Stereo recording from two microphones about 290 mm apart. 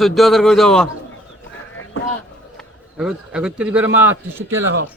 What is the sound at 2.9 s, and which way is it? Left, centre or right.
A man's voice, centre.